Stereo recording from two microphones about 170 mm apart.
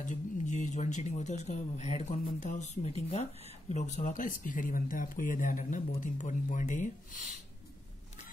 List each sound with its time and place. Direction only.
0.0 s speech: 45° left (ahead or behind)